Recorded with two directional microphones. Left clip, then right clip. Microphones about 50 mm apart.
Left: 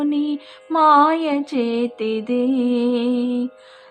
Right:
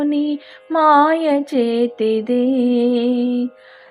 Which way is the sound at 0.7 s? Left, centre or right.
Right.